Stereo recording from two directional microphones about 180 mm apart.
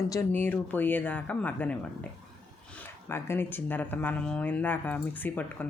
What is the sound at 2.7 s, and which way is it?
Speech, 10° left (ahead or behind).